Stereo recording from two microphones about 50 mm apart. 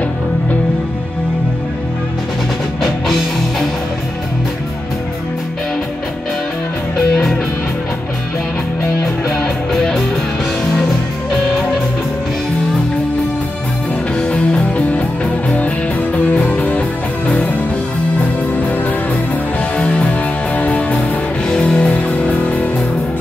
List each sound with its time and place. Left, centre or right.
2.8 s music: centre
9.7 s music: centre
14.1 s music: centre
18.6 s music: left
21.5 s music: centre
22.0 s music: left